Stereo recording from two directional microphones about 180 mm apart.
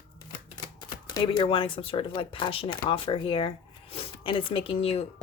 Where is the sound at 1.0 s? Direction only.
25° left (ahead or behind).